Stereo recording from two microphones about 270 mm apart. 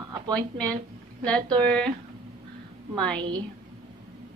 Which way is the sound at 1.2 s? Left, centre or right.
Centre.